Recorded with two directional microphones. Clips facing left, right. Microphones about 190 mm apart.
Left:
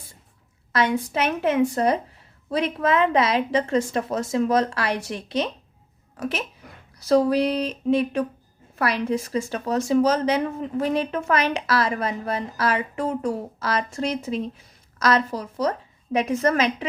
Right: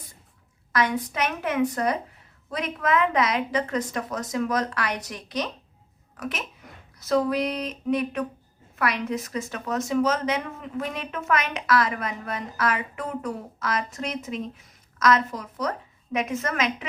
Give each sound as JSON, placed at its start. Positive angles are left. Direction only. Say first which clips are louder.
{"t": 0.7, "sound": "a woman's voice", "louder": "left 3 dB", "side_deg": 25}